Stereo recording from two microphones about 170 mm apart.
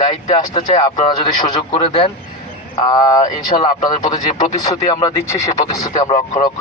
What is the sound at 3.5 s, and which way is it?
Speech, 40° left (ahead or behind).